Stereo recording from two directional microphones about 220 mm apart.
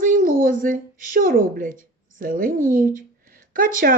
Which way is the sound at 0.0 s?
40° right (ahead or behind).